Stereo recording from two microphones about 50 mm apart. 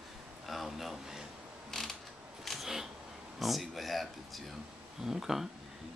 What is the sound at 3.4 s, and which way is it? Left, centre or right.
Speech, centre.